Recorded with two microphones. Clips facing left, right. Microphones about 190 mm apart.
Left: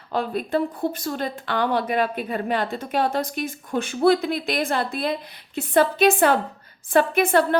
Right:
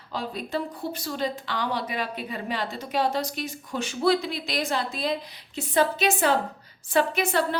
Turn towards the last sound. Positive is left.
turn(degrees=55)  # may be behind; listen again after turning